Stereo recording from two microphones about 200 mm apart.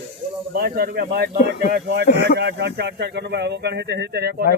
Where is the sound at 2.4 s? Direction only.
60° right (ahead or behind).